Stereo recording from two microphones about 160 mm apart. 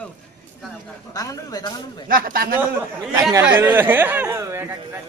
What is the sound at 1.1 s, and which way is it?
Speech, 20° left (ahead or behind).